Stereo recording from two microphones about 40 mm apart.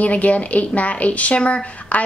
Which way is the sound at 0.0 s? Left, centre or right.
Left.